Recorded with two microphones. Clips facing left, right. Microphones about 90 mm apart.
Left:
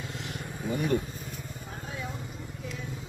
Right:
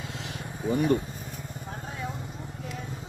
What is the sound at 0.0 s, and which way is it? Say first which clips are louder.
Vehicle: right 1 dB; 90° right.